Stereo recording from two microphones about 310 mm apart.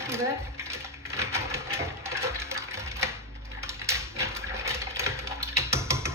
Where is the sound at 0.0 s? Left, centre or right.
Centre.